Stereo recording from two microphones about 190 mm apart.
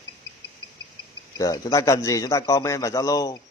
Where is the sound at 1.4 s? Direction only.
20° left (ahead or behind).